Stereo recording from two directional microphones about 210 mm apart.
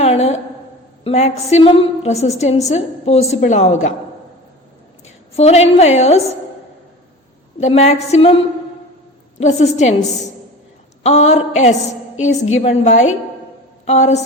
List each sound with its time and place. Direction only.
0.0 s a woman's voice: 30° left (ahead or behind)
5.4 s a woman's voice: 30° left (ahead or behind)
7.6 s a woman's voice: 30° left (ahead or behind)
9.4 s a woman's voice: 35° left (ahead or behind)
11.0 s a woman's voice: 30° left (ahead or behind)